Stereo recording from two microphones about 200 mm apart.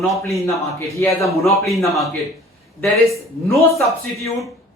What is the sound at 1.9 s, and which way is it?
Speech, centre (ahead or behind).